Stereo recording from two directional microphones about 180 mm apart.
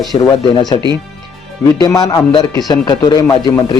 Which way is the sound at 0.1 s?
20° left (ahead or behind).